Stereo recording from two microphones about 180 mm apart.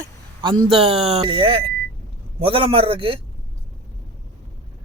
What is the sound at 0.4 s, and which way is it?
Speech, 30° right (ahead or behind).